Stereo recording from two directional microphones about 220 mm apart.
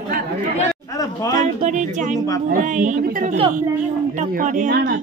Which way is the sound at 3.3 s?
25° right (ahead or behind).